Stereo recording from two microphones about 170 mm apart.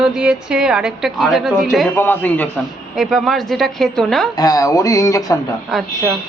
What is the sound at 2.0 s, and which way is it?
Speech, 10° left (ahead or behind).